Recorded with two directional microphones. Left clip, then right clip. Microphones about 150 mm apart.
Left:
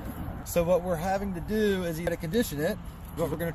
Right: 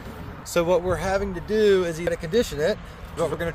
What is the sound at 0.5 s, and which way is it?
Speech, 35° right (ahead or behind).